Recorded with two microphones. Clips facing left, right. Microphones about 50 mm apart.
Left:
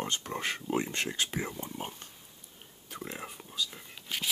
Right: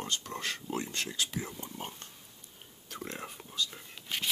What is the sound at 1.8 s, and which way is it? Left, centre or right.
Speech, centre.